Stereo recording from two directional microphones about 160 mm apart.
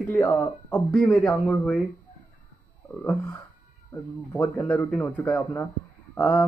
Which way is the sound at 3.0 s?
10° left (ahead or behind).